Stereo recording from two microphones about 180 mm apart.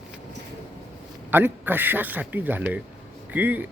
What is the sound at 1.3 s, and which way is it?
Speech, 10° right (ahead or behind).